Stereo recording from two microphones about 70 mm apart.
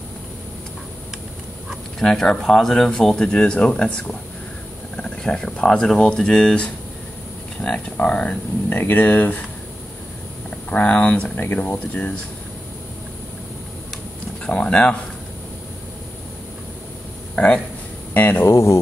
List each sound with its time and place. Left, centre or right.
2.0 s speech: centre
8.6 s speech: left
10.7 s speech: centre
14.4 s a sound: centre
18.1 s speech: left
18.5 s speech: left